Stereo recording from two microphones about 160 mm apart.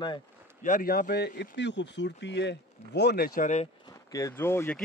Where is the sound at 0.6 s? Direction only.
60° left (ahead or behind).